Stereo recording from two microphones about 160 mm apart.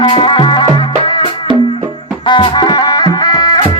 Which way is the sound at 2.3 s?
30° left (ahead or behind).